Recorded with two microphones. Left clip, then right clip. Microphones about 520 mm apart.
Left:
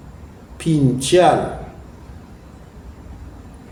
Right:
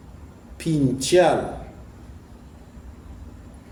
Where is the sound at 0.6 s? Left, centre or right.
Right.